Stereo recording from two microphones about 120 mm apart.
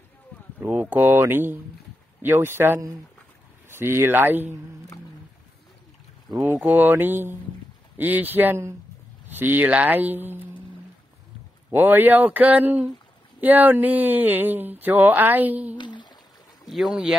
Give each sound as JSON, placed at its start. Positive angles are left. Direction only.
{"t": 0.6, "sound": "speech", "side_deg": -15}
{"t": 6.6, "sound": "speech", "side_deg": -15}
{"t": 11.7, "sound": "speech", "side_deg": -15}
{"t": 15.8, "sound": "a sound", "side_deg": 40}
{"t": 16.6, "sound": "speech", "side_deg": 0}